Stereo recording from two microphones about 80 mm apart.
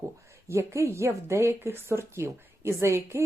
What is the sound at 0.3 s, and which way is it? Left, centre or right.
A woman's voice, right.